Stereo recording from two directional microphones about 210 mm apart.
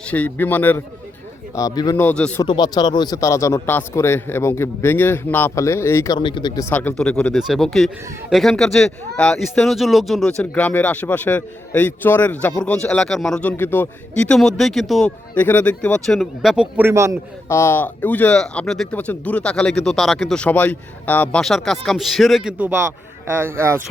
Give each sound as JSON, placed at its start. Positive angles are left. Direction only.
{"t": 0.1, "sound": "speech", "side_deg": 10}
{"t": 2.0, "sound": "speech", "side_deg": 5}
{"t": 2.4, "sound": "speech", "side_deg": 20}
{"t": 6.7, "sound": "speech", "side_deg": 10}
{"t": 17.5, "sound": "speech", "side_deg": 10}